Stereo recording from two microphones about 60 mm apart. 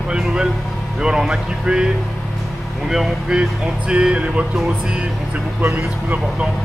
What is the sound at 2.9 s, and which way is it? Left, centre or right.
Speech, centre.